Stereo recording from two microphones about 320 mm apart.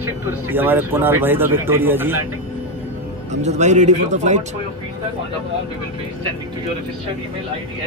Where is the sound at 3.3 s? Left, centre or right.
Right.